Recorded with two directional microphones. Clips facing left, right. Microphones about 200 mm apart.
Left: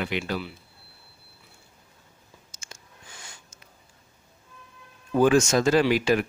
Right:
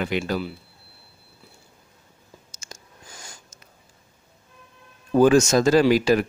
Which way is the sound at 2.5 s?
40° right (ahead or behind).